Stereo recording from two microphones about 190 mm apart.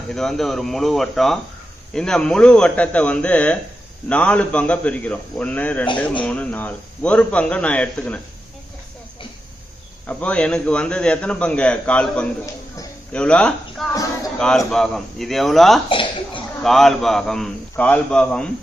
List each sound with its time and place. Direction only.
0.1 s a man's voice: centre (ahead or behind)
10.1 s a man's voice: 5° left (ahead or behind)
13.9 s a sound: 20° left (ahead or behind)
14.3 s a man's voice: 5° left (ahead or behind)
15.9 s speech: 25° left (ahead or behind)
16.6 s a man's voice: centre (ahead or behind)